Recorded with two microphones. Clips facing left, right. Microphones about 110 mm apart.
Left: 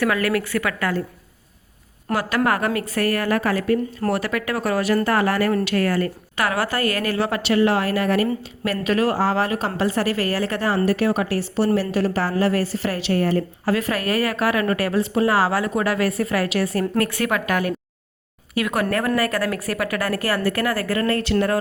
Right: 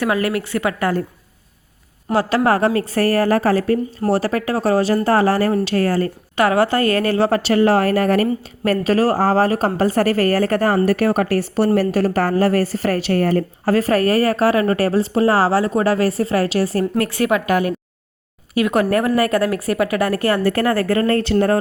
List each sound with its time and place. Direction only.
0.0 s a woman's voice: 25° right (ahead or behind)
2.1 s a woman's voice: 30° right (ahead or behind)